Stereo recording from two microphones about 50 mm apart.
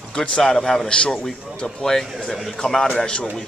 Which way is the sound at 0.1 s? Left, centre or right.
Centre.